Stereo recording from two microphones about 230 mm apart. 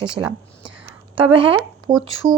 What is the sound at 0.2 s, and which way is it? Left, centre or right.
A woman's voice, centre.